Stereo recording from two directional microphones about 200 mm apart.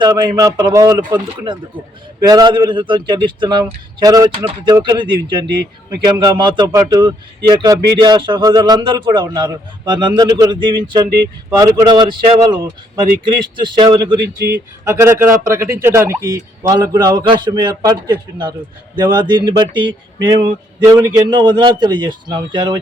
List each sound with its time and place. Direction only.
0.0 s a man's voice: 15° right (ahead or behind)
14.2 s speech: 55° right (ahead or behind)
14.8 s a man's voice: 15° right (ahead or behind)